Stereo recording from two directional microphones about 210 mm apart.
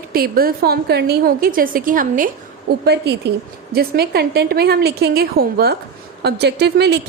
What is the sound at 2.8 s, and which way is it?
A woman's voice, 50° right (ahead or behind).